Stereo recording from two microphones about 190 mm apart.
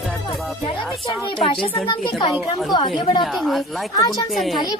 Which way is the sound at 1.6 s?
25° left (ahead or behind).